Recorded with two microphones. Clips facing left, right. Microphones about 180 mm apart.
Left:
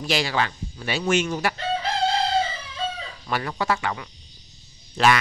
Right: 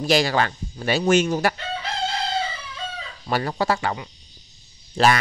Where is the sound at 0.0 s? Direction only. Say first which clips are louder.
Right 5 dB; 40° right (ahead or behind).